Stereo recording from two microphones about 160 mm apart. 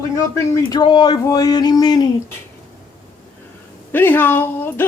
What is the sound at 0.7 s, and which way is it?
Speech, 25° left (ahead or behind).